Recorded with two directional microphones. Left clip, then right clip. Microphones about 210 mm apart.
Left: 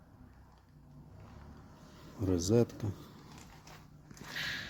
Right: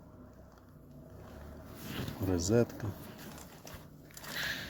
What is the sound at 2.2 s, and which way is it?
Speech, 20° left (ahead or behind).